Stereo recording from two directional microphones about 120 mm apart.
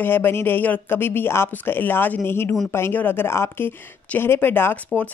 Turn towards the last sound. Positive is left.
turn(degrees=15)  # may be behind; listen again after turning